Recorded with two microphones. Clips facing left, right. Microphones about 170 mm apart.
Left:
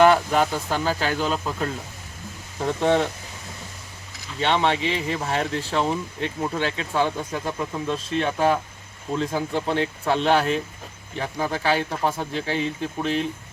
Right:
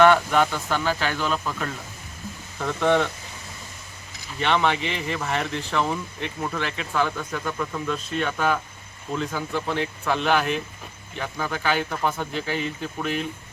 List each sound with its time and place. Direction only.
0.0 s speech: 35° left (ahead or behind)
4.4 s speech: 25° left (ahead or behind)